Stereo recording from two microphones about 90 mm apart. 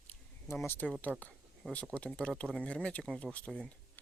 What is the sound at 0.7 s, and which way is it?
Speech, 20° left (ahead or behind).